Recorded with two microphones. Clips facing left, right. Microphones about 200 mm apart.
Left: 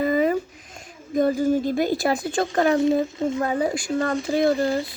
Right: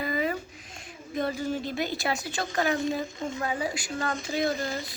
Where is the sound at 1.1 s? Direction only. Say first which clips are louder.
Left 9 dB; 45° left (ahead or behind).